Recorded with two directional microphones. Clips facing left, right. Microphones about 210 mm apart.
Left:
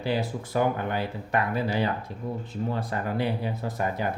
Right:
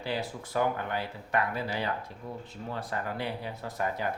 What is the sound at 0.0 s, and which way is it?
Speech, 15° left (ahead or behind).